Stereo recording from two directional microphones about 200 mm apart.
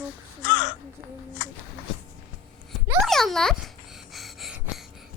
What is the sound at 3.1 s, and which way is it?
Dog, centre (ahead or behind).